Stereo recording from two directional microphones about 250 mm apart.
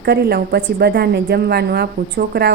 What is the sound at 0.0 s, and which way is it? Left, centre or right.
A woman's voice, right.